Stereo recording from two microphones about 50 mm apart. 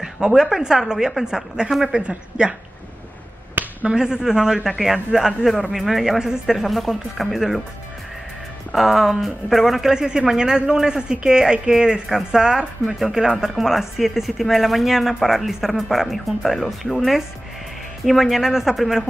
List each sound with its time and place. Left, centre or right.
0.0 s speech: centre
1.7 s speech: centre
2.0 s speech: centre
3.8 s speech: centre
8.7 s speech: centre